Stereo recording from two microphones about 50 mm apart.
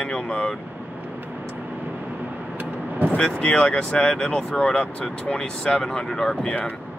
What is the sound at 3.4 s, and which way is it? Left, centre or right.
Speech, left.